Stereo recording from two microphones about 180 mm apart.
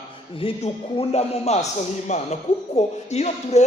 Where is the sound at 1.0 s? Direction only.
35° left (ahead or behind).